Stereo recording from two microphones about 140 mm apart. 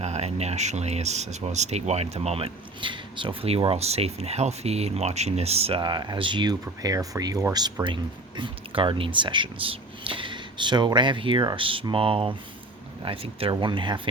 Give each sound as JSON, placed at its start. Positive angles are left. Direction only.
{"t": 0.0, "sound": "speech", "side_deg": -50}